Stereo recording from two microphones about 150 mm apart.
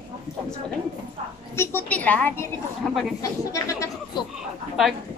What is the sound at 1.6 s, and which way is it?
Speech, 15° left (ahead or behind).